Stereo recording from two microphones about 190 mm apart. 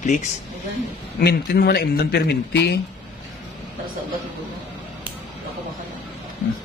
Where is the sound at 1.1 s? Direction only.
55° left (ahead or behind).